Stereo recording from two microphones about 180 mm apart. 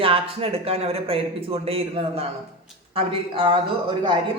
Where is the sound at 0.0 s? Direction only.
30° right (ahead or behind).